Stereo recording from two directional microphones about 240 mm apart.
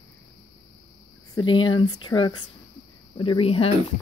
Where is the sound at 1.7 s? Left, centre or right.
Centre.